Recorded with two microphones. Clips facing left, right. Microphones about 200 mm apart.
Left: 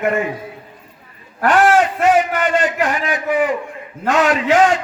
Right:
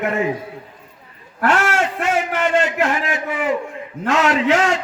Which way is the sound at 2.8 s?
25° right (ahead or behind).